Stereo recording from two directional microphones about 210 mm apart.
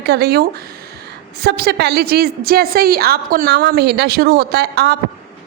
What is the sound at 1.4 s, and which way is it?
A woman's voice, 50° right (ahead or behind).